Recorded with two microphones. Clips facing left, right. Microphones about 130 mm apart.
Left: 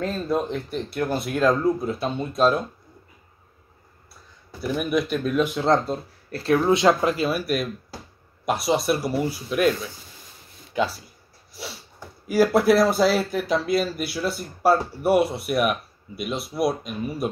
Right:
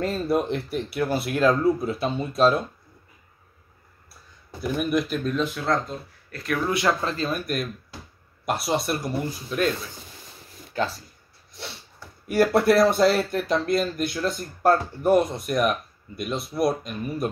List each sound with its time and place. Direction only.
0.0 s speech: 10° right (ahead or behind)
4.6 s speech: centre (ahead or behind)
5.5 s speech: 25° left (ahead or behind); by 9.7 s 10° left (ahead or behind)
10.8 s speech: 15° left (ahead or behind)
11.5 s sneeze: 5° left (ahead or behind)
12.3 s speech: centre (ahead or behind)